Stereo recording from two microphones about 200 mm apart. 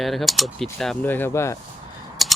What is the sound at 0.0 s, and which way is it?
Speech, centre (ahead or behind).